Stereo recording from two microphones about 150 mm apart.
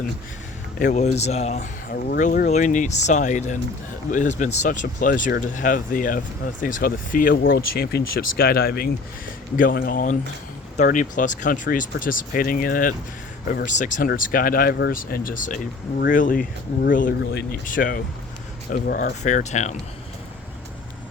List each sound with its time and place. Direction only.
0.9 s speech: 50° left (ahead or behind)
1.9 s speech: 65° left (ahead or behind)
2.5 s speech: 55° left (ahead or behind); by 8.9 s 90° left
9.6 s speech: 70° left (ahead or behind)
13.7 s speech: 55° left (ahead or behind)
18.7 s speech: 75° left (ahead or behind)
19.2 s speech: 55° left (ahead or behind)